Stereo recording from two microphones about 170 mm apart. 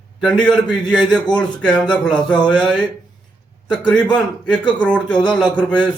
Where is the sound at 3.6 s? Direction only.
25° left (ahead or behind).